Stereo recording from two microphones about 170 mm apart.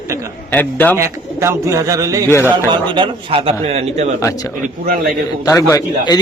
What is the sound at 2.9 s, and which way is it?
A man's voice, 30° right (ahead or behind).